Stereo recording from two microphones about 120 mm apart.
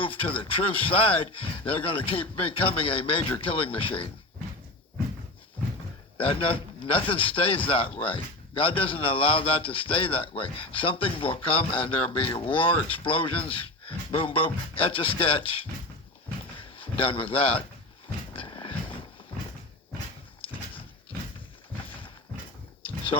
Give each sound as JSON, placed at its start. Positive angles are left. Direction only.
{"t": 0.0, "sound": "a man's voice", "side_deg": 50}
{"t": 6.1, "sound": "a man's voice", "side_deg": 50}
{"t": 18.3, "sound": "a sound", "side_deg": 45}